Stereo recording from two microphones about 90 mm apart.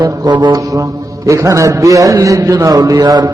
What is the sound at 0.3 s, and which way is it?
Music, 55° right (ahead or behind).